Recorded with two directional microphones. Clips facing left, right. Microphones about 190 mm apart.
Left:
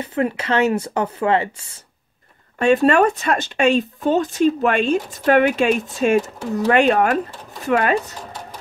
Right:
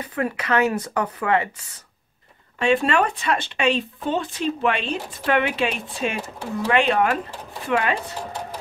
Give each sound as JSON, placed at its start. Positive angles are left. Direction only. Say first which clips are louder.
{"t": 0.0, "sound": "speech", "louder": "left 4 dB", "side_deg": 25}
{"t": 2.6, "sound": "speech", "louder": "left 5 dB", "side_deg": 45}